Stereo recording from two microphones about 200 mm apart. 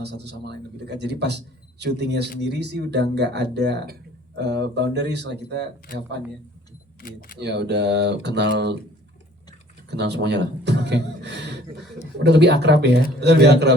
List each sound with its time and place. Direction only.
0.0 s speech: 55° right (ahead or behind)
7.0 s speech: 45° left (ahead or behind)
7.3 s speech: 60° right (ahead or behind)
9.9 s speech: 60° right (ahead or behind)